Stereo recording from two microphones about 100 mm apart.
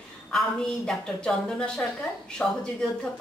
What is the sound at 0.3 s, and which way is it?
A woman's voice, 5° left (ahead or behind).